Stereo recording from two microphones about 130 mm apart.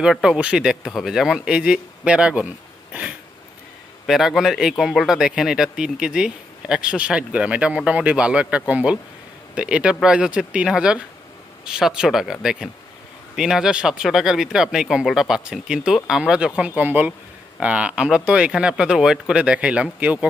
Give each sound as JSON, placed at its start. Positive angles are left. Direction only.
{"t": 0.0, "sound": "a man's voice", "side_deg": -5}